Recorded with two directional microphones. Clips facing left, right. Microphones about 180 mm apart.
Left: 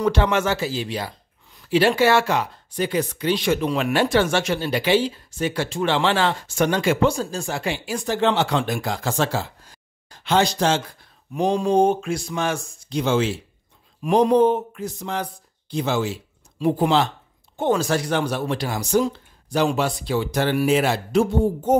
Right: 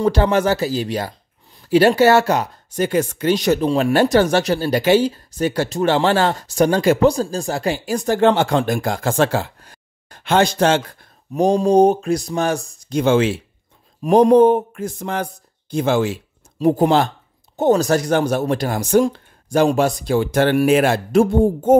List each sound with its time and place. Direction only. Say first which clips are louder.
0.0 s speech: right 4 dB; 35° right (ahead or behind); by 11.1 s 55° right (ahead or behind)
11.3 s speech: right 5 dB; 40° right (ahead or behind)
13.0 s speech: right 5 dB; 60° right (ahead or behind)
14.0 s speech: right 5 dB; 45° right (ahead or behind)
16.5 s speech: right 4 dB; 45° right (ahead or behind)